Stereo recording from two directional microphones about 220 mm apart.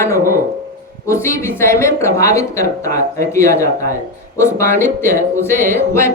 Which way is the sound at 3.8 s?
35° right (ahead or behind).